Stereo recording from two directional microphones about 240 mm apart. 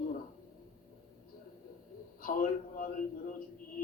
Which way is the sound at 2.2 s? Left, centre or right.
Left.